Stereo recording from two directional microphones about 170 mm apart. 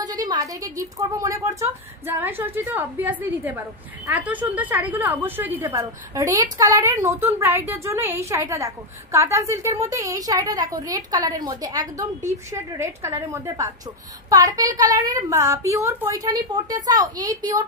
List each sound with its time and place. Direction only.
0.0 s a woman's voice: 20° right (ahead or behind)